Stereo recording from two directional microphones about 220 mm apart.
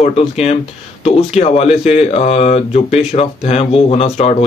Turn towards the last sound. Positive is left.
turn(degrees=30)  # may be behind; listen again after turning